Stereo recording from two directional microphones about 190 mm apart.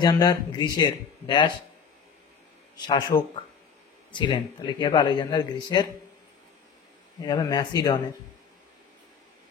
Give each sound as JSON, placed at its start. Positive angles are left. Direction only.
{"t": 0.0, "sound": "speech", "side_deg": 20}
{"t": 2.8, "sound": "speech", "side_deg": 25}
{"t": 7.2, "sound": "speech", "side_deg": 20}